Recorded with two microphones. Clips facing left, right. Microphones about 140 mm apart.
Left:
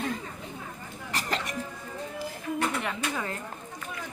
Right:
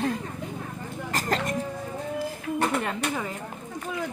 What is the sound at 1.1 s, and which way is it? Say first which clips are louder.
Throat clearing: right 5 dB; 45° right (ahead or behind).